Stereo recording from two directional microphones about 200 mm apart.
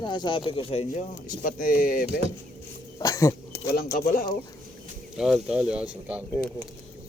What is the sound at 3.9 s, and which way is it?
Speech, 45° left (ahead or behind).